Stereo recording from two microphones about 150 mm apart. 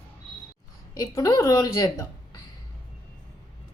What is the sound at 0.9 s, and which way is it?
A woman's voice, 25° left (ahead or behind).